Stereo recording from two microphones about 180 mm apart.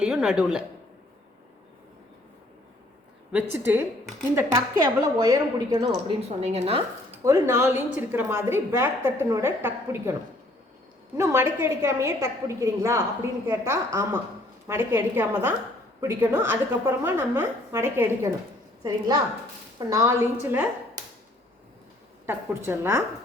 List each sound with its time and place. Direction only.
0.0 s a woman's voice: 5° right (ahead or behind)
3.3 s a woman's voice: 10° right (ahead or behind)
6.2 s a woman's voice: 35° right (ahead or behind)
7.2 s a woman's voice: 15° right (ahead or behind)
11.2 s a woman's voice: 15° right (ahead or behind)
22.3 s a woman's voice: 15° right (ahead or behind)